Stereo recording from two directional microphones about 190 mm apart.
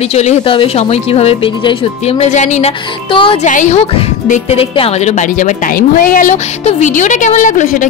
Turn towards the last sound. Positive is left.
turn(degrees=40)  # may be behind; listen again after turning